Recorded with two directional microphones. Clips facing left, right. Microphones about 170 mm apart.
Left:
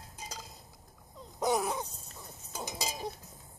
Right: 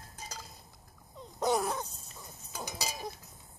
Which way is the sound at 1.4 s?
5° left (ahead or behind).